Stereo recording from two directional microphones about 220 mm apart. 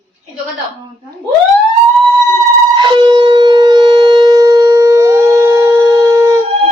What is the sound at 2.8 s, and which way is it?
Shofar, 20° right (ahead or behind).